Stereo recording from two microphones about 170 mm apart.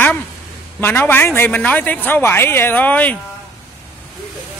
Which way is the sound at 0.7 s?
10° left (ahead or behind).